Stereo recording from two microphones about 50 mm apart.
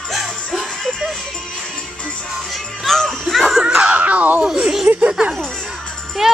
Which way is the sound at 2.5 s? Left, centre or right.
Centre.